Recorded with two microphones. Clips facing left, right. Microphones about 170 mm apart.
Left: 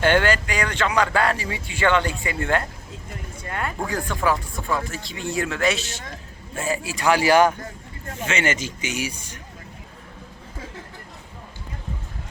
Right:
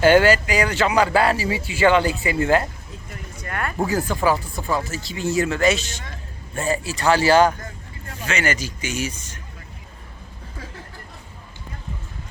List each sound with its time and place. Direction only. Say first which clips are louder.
0.0 s speech: right 5 dB; 5° right (ahead or behind)
3.4 s speech: right 1 dB; 20° left (ahead or behind)
3.8 s speech: right 3 dB; 5° right (ahead or behind); by 9.4 s 10° left (ahead or behind)